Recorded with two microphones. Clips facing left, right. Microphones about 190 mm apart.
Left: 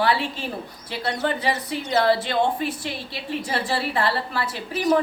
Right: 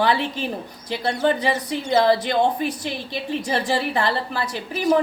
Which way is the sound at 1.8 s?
15° right (ahead or behind).